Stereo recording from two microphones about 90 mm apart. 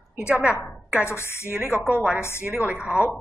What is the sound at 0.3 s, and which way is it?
Speech, 15° right (ahead or behind).